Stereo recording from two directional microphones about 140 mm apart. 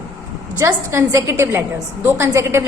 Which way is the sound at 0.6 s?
20° right (ahead or behind).